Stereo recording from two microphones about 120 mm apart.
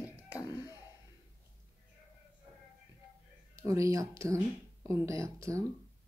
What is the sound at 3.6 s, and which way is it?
Speech, 25° right (ahead or behind).